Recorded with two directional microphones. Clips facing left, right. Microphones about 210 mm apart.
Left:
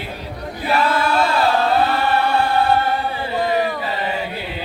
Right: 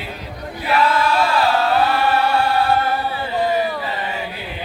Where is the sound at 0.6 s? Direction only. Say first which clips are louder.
Right 1 dB; 25° left (ahead or behind).